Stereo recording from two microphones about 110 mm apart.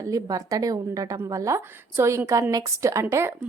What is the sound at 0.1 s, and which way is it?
A woman's voice, 30° right (ahead or behind).